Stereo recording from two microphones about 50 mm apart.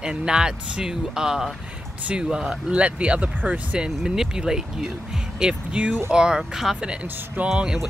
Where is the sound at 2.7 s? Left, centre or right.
Right.